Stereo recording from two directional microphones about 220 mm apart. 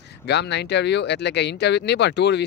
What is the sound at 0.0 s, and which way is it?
Speech, 50° left (ahead or behind).